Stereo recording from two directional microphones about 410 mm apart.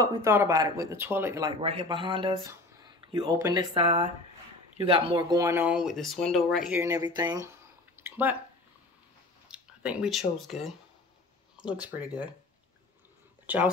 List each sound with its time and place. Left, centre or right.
0.0 s speech: centre
9.5 s speech: centre
13.5 s speech: centre